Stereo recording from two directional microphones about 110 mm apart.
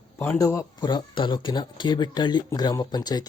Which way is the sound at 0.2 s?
25° left (ahead or behind).